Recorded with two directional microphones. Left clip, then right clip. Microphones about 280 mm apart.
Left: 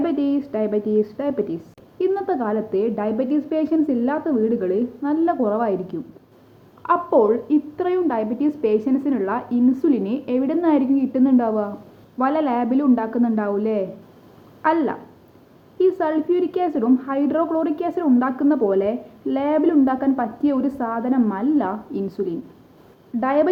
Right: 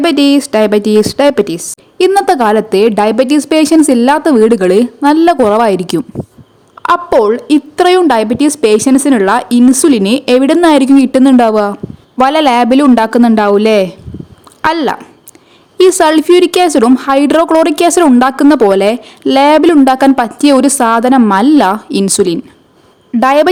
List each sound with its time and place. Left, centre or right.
0.0 s a woman's voice: right